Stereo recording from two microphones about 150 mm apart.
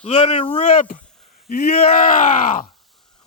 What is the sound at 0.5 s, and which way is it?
Speech, 60° left (ahead or behind).